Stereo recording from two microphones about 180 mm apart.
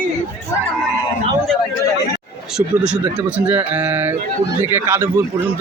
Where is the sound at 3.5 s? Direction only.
10° right (ahead or behind).